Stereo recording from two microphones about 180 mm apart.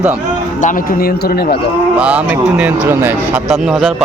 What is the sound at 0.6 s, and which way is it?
Speech, 50° left (ahead or behind).